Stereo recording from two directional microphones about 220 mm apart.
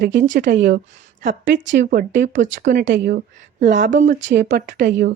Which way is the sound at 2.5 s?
45° right (ahead or behind).